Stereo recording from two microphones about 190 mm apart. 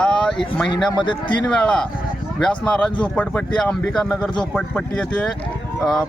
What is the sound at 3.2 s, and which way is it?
Speech, 5° left (ahead or behind).